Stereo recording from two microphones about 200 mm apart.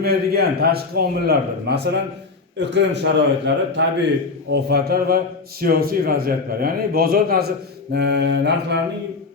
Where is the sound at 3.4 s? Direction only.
60° right (ahead or behind).